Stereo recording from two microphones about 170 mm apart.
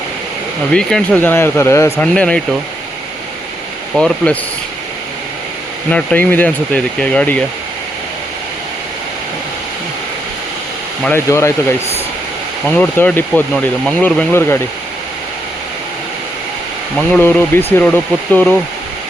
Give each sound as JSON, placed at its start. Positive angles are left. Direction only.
{"t": 0.7, "sound": "speech", "side_deg": 5}
{"t": 3.9, "sound": "speech", "side_deg": 5}
{"t": 5.9, "sound": "speech", "side_deg": 10}
{"t": 11.0, "sound": "speech", "side_deg": 15}
{"t": 12.6, "sound": "speech", "side_deg": 10}
{"t": 17.1, "sound": "speech", "side_deg": 10}